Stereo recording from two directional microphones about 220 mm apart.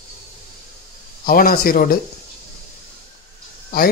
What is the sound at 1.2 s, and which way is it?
Speech, 40° left (ahead or behind).